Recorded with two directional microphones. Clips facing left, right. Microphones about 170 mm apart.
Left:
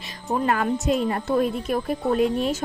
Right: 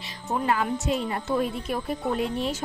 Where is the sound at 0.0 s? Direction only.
50° left (ahead or behind).